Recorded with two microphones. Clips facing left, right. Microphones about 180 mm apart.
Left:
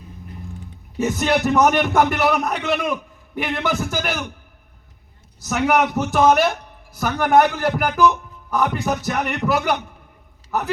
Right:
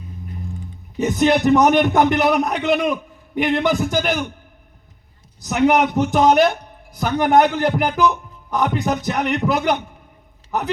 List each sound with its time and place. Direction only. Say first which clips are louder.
0.9 s speech: right 3 dB; 20° right (ahead or behind)
5.5 s speech: right 3 dB; 15° right (ahead or behind)